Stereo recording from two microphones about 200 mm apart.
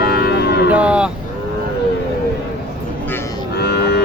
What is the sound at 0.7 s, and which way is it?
Speech, 5° right (ahead or behind).